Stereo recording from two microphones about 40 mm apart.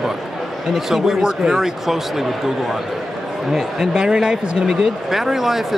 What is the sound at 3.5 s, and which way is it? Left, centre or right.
Speech, centre.